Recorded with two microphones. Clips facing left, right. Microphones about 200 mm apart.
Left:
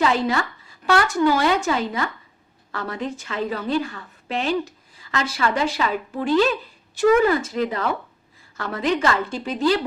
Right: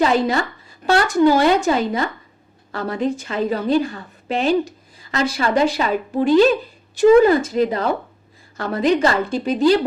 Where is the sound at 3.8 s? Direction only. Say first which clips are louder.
Right 6 dB; 35° right (ahead or behind).